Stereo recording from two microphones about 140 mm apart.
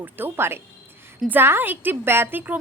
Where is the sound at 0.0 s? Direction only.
15° right (ahead or behind).